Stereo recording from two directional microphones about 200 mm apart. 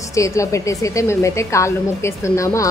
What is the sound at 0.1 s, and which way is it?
A woman's voice, 15° left (ahead or behind).